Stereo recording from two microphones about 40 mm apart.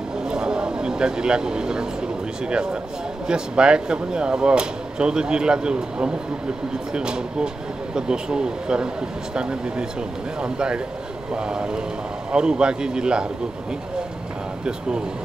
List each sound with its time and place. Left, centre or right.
0.2 s vehicle: right
3.3 s speech: right